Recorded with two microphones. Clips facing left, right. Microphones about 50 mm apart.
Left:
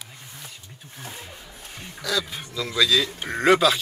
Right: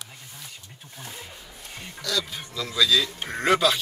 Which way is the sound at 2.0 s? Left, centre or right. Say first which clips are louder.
Left 2 dB; centre.